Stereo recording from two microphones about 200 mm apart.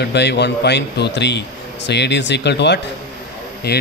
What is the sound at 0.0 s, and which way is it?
Speech, 55° left (ahead or behind).